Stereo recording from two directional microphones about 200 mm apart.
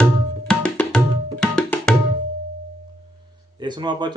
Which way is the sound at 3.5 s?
20° right (ahead or behind).